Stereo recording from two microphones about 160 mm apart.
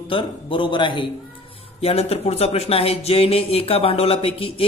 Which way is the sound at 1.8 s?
40° left (ahead or behind).